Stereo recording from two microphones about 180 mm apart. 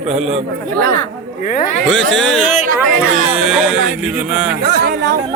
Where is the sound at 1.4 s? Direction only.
50° left (ahead or behind).